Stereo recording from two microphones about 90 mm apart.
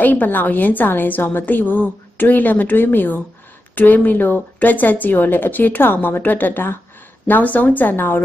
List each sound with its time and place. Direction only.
0.0 s a woman's voice: 20° left (ahead or behind)